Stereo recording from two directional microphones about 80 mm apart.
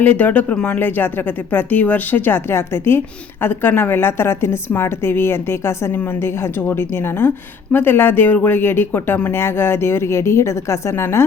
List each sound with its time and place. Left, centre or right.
0.0 s a woman's voice: centre